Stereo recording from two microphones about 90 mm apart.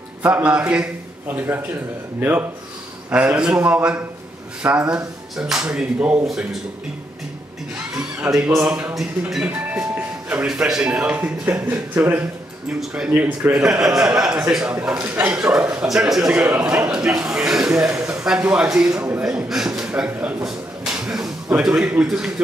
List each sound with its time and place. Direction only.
0.2 s a man's voice: 15° right (ahead or behind)
1.3 s a man's voice: 25° right (ahead or behind)
7.9 s music: 10° right (ahead or behind)
8.6 s a man's voice: 15° right (ahead or behind)
12.8 s a man's voice: 10° right (ahead or behind)
13.1 s speech: 20° right (ahead or behind)
13.6 s a man's voice: 5° right (ahead or behind)
15.1 s speech: 25° right (ahead or behind)
15.5 s a man's voice: 10° right (ahead or behind)
17.9 s a sound: 35° right (ahead or behind)
18.2 s a man's voice: 10° right (ahead or behind)
19.2 s a man's voice: 5° right (ahead or behind)
20.4 s a sound: 5° right (ahead or behind)
21.6 s a man's voice: 10° right (ahead or behind)